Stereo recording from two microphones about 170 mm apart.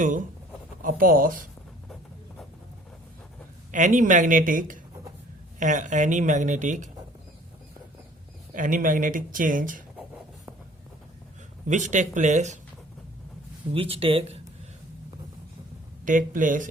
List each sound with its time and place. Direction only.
0.8 s speech: 55° right (ahead or behind)
3.7 s speech: 45° right (ahead or behind)
8.5 s speech: 50° right (ahead or behind)
11.6 s speech: 45° right (ahead or behind)
13.7 s speech: 35° right (ahead or behind)
16.0 s speech: 50° right (ahead or behind)